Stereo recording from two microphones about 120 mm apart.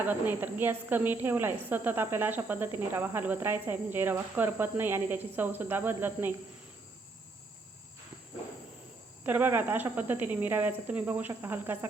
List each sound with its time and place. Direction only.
0.0 s a woman's voice: 15° right (ahead or behind)
9.2 s a woman's voice: 15° right (ahead or behind)